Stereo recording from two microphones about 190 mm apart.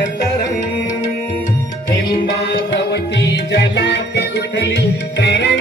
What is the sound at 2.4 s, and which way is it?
Music, 65° left (ahead or behind).